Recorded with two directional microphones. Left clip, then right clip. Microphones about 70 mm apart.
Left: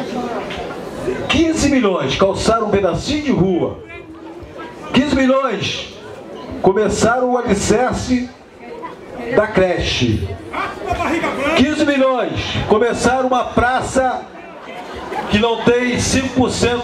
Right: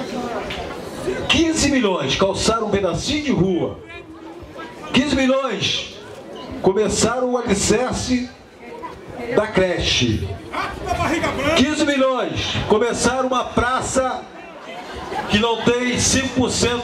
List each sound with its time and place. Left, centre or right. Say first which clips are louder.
0.0 s a sound: left 3 dB; right
4.9 s a man's voice: left 3 dB; right
6.8 s a man's voice: left 4 dB; right
9.3 s a man's voice: left 4 dB; right